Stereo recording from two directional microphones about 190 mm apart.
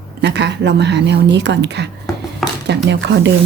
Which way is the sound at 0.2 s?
65° right (ahead or behind).